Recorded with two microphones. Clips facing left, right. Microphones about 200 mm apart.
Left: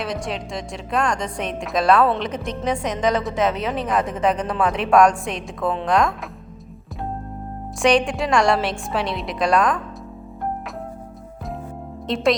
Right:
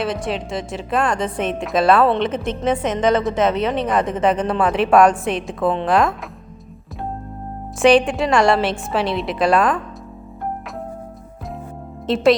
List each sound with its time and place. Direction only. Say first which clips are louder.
0.0 s a woman's voice: right 4 dB; centre (ahead or behind)
7.8 s a woman's voice: right 4 dB; 5° right (ahead or behind)
12.0 s a woman's voice: right 4 dB; 5° right (ahead or behind)